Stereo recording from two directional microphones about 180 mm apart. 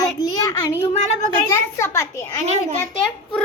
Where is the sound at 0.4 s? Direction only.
15° left (ahead or behind).